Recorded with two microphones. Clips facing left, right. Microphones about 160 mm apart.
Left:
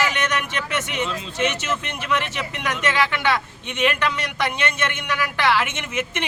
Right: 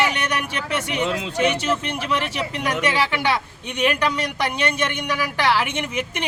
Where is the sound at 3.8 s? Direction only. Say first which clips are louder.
Right 1 dB; 40° right (ahead or behind).